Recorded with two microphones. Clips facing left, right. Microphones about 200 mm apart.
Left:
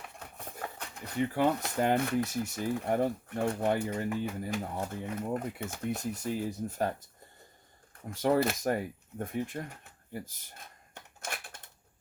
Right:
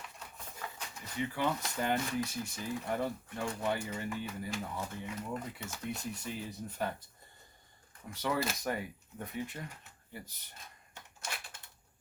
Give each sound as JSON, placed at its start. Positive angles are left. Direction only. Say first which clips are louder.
{"t": 0.2, "sound": "speech", "louder": "left 6 dB", "side_deg": 55}
{"t": 8.1, "sound": "speech", "louder": "left 7 dB", "side_deg": 50}
{"t": 11.2, "sound": "typewriter", "louder": "left 4 dB", "side_deg": 55}